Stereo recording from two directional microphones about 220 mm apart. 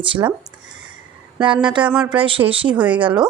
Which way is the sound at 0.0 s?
25° right (ahead or behind).